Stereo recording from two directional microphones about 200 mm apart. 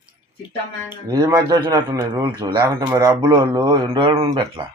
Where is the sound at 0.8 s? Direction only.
20° right (ahead or behind).